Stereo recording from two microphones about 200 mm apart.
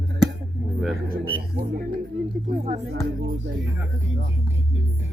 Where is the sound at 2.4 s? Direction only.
35° right (ahead or behind).